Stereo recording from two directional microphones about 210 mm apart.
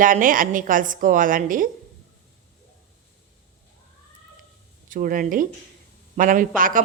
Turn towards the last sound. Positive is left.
turn(degrees=-40)  # may be behind; listen again after turning